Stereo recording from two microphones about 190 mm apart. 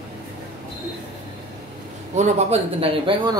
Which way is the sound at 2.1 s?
35° right (ahead or behind).